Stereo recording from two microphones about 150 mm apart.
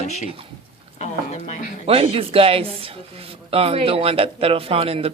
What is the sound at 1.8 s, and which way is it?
Speech, 40° right (ahead or behind).